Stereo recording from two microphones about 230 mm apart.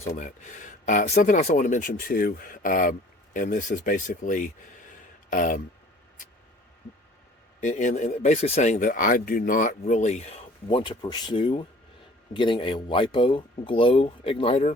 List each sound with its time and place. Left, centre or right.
0.2 s speech: left
7.6 s speech: left